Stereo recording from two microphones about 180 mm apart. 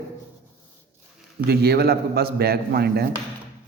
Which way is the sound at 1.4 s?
60° right (ahead or behind).